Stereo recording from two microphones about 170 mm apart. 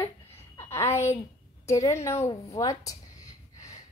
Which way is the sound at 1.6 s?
15° left (ahead or behind).